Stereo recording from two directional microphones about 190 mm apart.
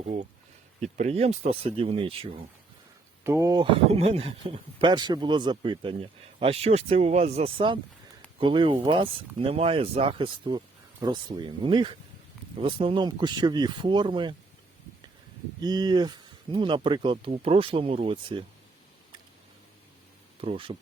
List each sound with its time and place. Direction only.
0.9 s speech: 35° right (ahead or behind)
3.2 s speech: 15° right (ahead or behind)
15.6 s speech: 20° right (ahead or behind)
20.4 s speech: 30° right (ahead or behind)